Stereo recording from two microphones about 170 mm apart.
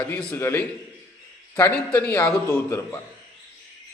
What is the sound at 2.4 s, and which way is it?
Speech, 15° left (ahead or behind).